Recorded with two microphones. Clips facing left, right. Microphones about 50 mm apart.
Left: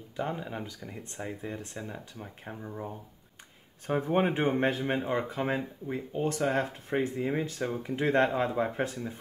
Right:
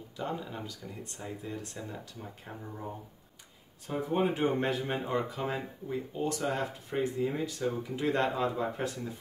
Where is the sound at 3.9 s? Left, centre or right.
Left.